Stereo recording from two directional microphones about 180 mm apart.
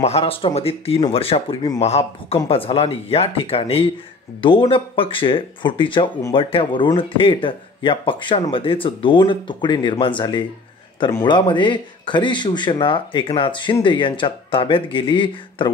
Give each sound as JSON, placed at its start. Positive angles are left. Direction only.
{"t": 0.0, "sound": "speech", "side_deg": 35}